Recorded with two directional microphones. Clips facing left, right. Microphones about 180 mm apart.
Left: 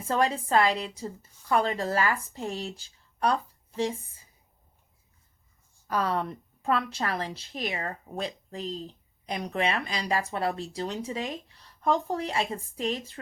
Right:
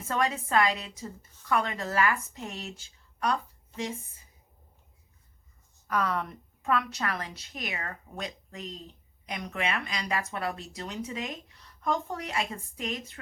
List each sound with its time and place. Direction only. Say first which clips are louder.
0.1 s speech: left 3 dB; 30° left (ahead or behind)
5.9 s speech: left 2 dB; 30° left (ahead or behind)